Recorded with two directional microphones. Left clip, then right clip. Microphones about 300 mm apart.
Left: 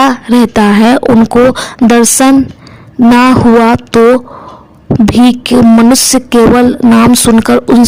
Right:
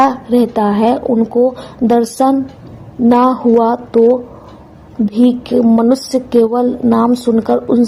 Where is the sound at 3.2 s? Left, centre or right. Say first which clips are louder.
Left 5 dB; left.